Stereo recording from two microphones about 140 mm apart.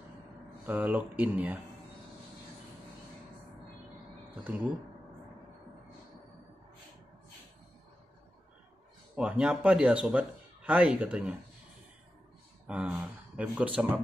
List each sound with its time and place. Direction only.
0.7 s speech: 10° right (ahead or behind)
4.5 s speech: 10° right (ahead or behind)
9.1 s speech: 10° right (ahead or behind)
12.6 s speech: 10° right (ahead or behind)